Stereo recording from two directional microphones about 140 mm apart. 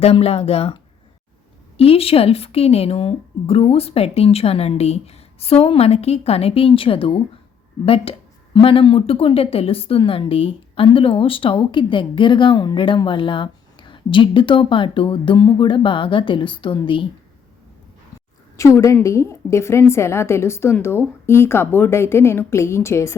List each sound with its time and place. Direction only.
0.0 s a woman's voice: 45° left (ahead or behind)
1.8 s a woman's voice: 45° left (ahead or behind)
18.5 s a woman's voice: 20° left (ahead or behind)